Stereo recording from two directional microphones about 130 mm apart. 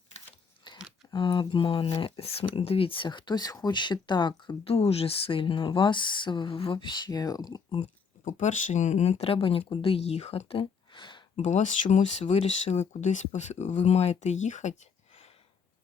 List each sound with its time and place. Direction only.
0.7 s scissors: 35° left (ahead or behind)
1.1 s speech: 40° left (ahead or behind)
8.2 s speech: 75° left (ahead or behind); by 11.2 s 35° left (ahead or behind)
11.3 s speech: 65° left (ahead or behind)